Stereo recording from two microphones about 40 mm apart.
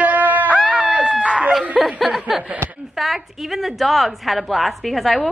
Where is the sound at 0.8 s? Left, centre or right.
Right.